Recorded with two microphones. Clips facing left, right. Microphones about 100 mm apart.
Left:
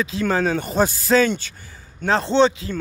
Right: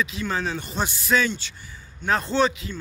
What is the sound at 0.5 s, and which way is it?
Speech, 50° left (ahead or behind).